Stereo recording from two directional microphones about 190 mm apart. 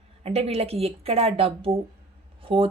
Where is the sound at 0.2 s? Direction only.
30° right (ahead or behind).